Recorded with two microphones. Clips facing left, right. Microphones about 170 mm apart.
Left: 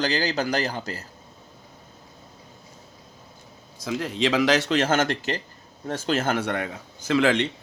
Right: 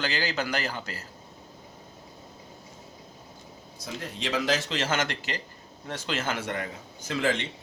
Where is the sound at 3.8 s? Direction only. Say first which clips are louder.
Left 10 dB; 90° left.